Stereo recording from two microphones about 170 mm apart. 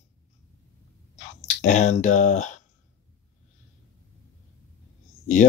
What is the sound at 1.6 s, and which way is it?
Speech, 45° left (ahead or behind).